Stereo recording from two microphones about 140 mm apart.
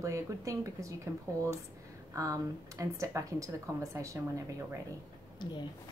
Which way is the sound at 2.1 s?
25° right (ahead or behind).